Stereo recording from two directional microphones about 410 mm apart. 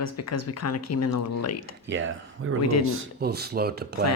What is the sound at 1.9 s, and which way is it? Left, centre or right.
Speech, right.